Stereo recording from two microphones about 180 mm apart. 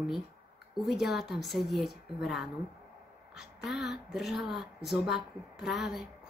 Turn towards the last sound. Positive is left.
turn(degrees=0)  # may be behind; listen again after turning